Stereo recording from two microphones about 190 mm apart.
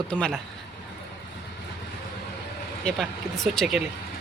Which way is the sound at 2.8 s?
Centre (ahead or behind).